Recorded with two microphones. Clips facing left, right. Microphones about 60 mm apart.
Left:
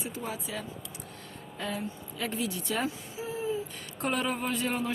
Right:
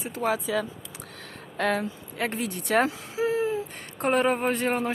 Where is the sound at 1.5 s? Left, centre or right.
Right.